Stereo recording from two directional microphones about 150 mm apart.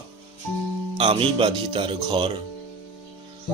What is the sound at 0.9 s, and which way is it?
Speech, 35° right (ahead or behind).